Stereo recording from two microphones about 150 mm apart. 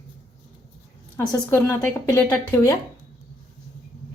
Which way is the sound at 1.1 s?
15° left (ahead or behind).